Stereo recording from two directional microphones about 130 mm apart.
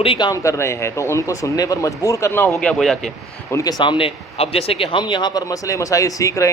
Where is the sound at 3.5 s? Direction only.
25° left (ahead or behind).